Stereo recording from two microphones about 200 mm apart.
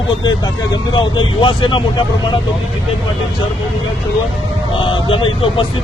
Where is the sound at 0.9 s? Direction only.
25° left (ahead or behind).